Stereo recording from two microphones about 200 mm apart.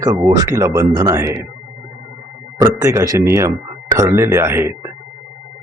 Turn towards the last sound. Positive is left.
turn(degrees=-10)  # may be behind; listen again after turning